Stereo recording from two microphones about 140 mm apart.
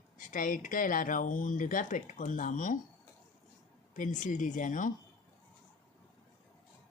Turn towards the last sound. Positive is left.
turn(degrees=70)  # may be behind; listen again after turning